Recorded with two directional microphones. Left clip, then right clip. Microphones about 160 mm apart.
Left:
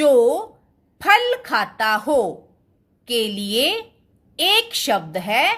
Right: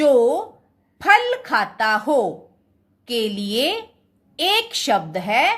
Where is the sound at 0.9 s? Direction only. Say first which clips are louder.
Even; 20° left (ahead or behind).